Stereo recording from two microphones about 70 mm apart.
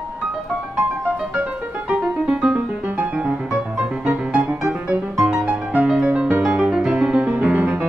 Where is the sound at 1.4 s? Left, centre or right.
Centre.